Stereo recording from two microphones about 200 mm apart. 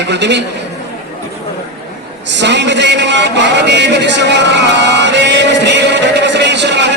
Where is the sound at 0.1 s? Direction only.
60° right (ahead or behind).